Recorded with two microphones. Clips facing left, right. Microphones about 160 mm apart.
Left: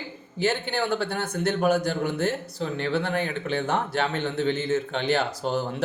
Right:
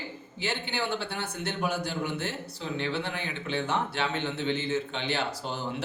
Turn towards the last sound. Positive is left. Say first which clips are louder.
# left 7 dB
turn(degrees=50)  # may be behind; listen again after turning